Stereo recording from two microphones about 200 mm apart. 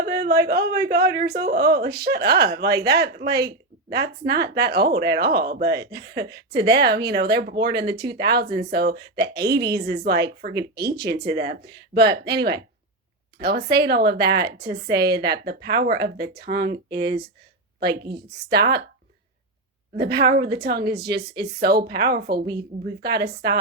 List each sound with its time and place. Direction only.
0.0 s speech: 50° right (ahead or behind)
20.0 s speech: 55° right (ahead or behind)